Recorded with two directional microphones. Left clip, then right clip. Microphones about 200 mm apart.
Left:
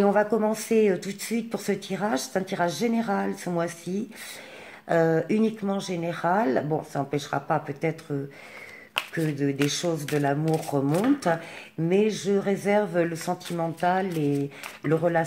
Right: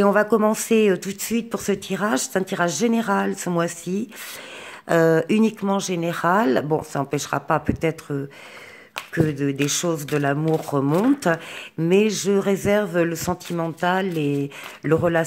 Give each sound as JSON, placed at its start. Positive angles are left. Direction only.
{"t": 0.0, "sound": "speech", "side_deg": -35}